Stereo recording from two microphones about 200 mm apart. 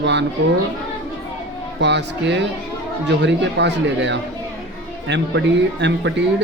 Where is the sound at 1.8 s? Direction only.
60° right (ahead or behind).